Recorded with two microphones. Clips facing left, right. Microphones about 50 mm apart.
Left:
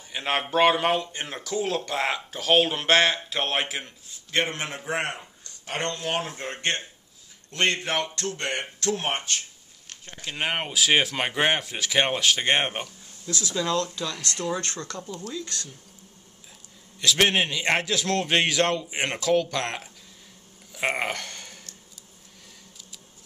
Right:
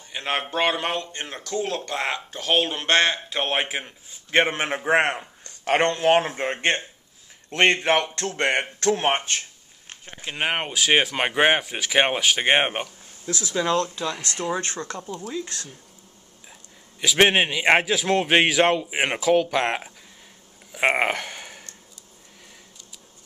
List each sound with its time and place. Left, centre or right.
0.1 s speech: centre
4.4 s a man's voice: right
9.8 s a sound: right
10.3 s speech: centre
15.0 s speech: centre
17.2 s speech: right
20.7 s a sound: right